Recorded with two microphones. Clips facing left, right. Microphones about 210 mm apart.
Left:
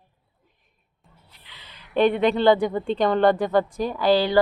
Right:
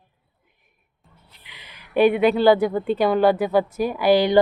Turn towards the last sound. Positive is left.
turn(degrees=-15)  # may be behind; listen again after turning